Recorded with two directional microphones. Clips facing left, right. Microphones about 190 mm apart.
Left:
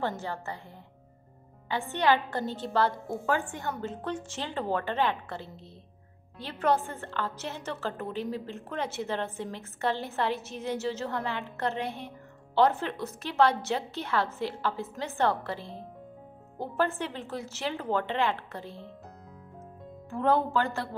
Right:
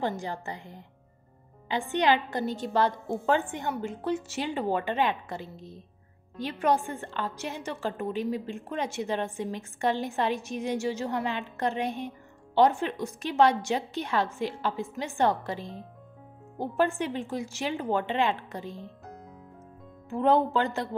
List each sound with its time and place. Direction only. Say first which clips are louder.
0.0 s a woman's voice: right 1 dB; 15° right (ahead or behind)
20.1 s speech: right 3 dB; 20° right (ahead or behind)